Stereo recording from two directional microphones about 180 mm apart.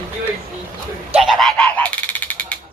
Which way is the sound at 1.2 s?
Centre (ahead or behind).